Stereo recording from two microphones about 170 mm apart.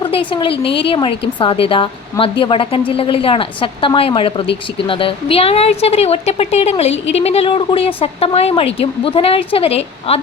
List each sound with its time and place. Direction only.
0.0 s a woman's voice: 30° left (ahead or behind)